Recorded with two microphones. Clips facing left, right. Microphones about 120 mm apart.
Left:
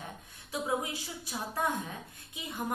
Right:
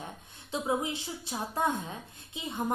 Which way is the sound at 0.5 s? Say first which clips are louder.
Right 2 dB; 25° right (ahead or behind).